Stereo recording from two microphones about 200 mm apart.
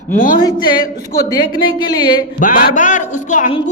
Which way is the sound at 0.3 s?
20° left (ahead or behind).